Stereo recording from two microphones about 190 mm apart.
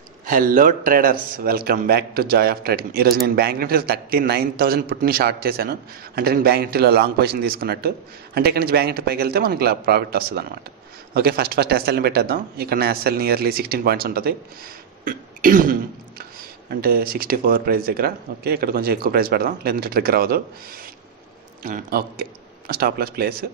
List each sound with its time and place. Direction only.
0.3 s a man's voice: 45° right (ahead or behind)
15.0 s throat clearing: 45° right (ahead or behind)
16.8 s a man's voice: 50° right (ahead or behind)